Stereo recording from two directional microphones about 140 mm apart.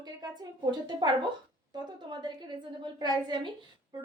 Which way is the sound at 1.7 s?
30° right (ahead or behind).